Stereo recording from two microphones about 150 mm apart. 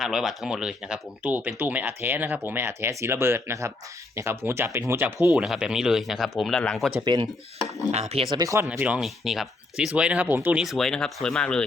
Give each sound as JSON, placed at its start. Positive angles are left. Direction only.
{"t": 0.0, "sound": "speech", "side_deg": -5}
{"t": 5.3, "sound": "speech", "side_deg": -5}
{"t": 7.0, "sound": "speech", "side_deg": -30}
{"t": 8.3, "sound": "speech", "side_deg": -25}
{"t": 8.7, "sound": "speech", "side_deg": -5}
{"t": 10.6, "sound": "speech", "side_deg": 0}